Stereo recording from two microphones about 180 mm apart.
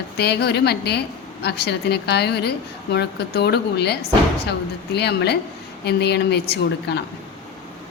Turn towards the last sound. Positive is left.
turn(degrees=65)  # may be behind; listen again after turning